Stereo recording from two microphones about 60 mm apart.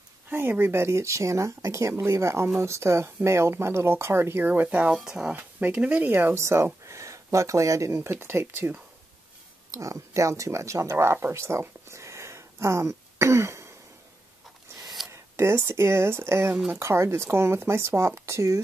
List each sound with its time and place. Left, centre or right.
0.3 s speech: right
4.5 s speech: right
4.9 s speech: centre
5.3 s speech: right
6.1 s speech: right
9.7 s speech: right
11.9 s throat clearing: right
15.0 s a sound: centre
15.3 s speech: right